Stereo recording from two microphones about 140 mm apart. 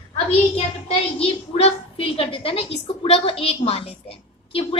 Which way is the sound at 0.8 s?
45° left (ahead or behind).